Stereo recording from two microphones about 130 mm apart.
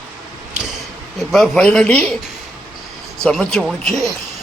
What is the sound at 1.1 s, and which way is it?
Speech, centre (ahead or behind).